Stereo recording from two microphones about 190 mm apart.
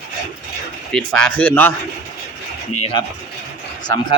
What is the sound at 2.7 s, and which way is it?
Speech, 35° left (ahead or behind).